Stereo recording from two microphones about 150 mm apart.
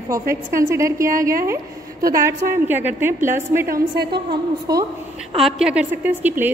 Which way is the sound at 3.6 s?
85° right.